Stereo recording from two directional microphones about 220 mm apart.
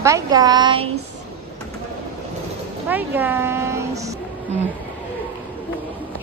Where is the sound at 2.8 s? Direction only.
10° right (ahead or behind).